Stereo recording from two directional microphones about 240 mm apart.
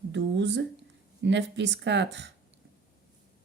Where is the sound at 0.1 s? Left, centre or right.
Right.